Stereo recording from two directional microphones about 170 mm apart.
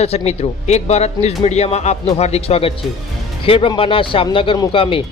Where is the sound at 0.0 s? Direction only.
40° left (ahead or behind).